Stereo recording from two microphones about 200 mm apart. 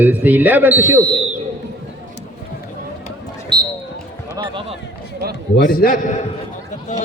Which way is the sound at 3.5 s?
20° right (ahead or behind).